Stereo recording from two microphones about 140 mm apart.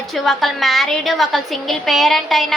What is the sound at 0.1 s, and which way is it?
A woman's voice, centre (ahead or behind).